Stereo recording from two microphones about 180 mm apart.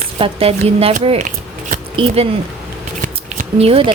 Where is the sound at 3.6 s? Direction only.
30° right (ahead or behind).